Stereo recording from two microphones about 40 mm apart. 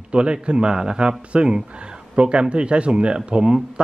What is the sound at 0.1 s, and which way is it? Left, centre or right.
A man's voice, right.